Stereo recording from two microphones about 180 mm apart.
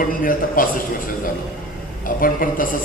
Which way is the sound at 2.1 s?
50° left (ahead or behind).